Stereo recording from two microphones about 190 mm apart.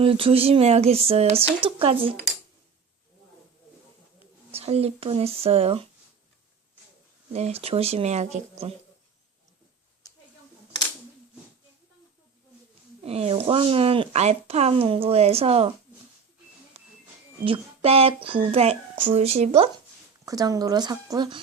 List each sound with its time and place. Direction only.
0.0 s speech: 30° right (ahead or behind)
4.5 s speech: 35° right (ahead or behind)
7.3 s speech: 35° right (ahead or behind)
13.0 s speech: 30° right (ahead or behind)
16.7 s a sound: 30° right (ahead or behind)
17.4 s speech: 30° right (ahead or behind)
20.2 s speech: 20° right (ahead or behind)